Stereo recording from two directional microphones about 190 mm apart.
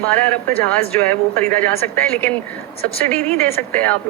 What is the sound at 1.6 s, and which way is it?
Speech, 10° left (ahead or behind).